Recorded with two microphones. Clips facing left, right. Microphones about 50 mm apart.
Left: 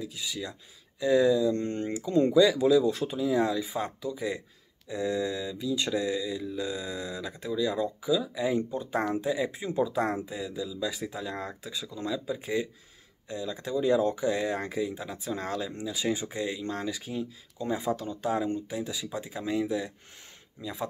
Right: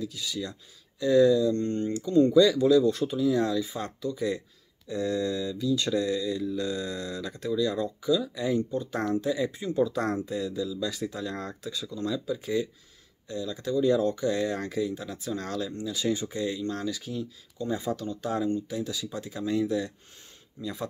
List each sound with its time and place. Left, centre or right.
0.0 s mantra: left